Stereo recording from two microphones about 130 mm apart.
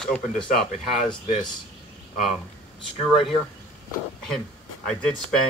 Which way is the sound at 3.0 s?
Centre (ahead or behind).